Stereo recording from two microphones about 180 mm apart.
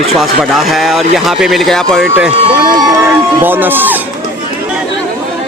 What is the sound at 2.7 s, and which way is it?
Speech, 20° right (ahead or behind).